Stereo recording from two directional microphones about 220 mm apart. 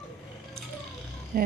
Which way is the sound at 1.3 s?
40° right (ahead or behind).